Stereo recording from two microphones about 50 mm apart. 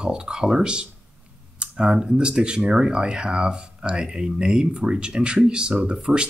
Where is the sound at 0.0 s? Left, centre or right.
Centre.